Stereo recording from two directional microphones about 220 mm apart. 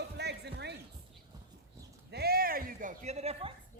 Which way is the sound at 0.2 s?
50° right (ahead or behind).